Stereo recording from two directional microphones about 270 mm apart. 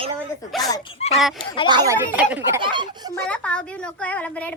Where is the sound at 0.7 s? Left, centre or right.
Centre.